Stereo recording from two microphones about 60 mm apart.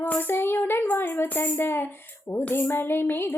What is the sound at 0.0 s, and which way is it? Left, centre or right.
Female singing, left.